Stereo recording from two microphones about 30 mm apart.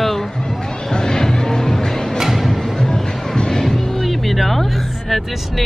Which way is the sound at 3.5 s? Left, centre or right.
Centre.